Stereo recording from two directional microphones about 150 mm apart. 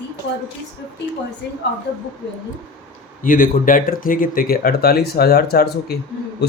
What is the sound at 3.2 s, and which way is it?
Speech, 65° left (ahead or behind).